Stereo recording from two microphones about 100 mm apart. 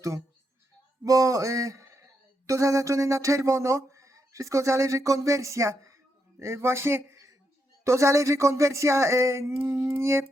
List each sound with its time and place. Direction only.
1.0 s speech: 35° right (ahead or behind)